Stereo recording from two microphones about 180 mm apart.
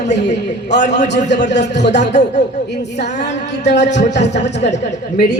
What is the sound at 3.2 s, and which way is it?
A man's voice, 70° left (ahead or behind).